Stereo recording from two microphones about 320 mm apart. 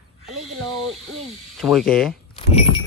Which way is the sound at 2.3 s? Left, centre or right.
Centre.